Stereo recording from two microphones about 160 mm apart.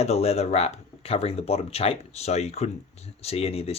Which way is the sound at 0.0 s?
40° left (ahead or behind).